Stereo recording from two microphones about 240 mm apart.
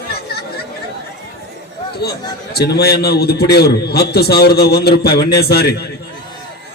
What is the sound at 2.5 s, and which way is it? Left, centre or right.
A man's voice, left.